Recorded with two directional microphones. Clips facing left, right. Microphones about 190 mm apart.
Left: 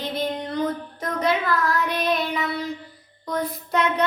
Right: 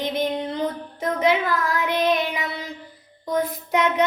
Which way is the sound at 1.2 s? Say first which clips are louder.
Right 1 dB; 15° right (ahead or behind).